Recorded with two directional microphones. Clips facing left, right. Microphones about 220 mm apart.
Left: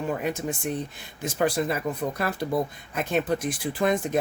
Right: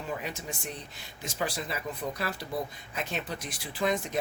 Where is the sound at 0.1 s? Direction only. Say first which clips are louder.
Left 5 dB; 50° left (ahead or behind).